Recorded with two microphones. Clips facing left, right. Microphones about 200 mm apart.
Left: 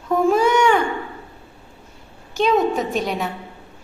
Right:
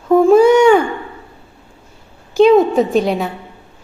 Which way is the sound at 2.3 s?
30° right (ahead or behind).